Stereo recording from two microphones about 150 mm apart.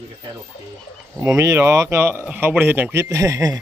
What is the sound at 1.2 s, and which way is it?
Speech, 20° right (ahead or behind).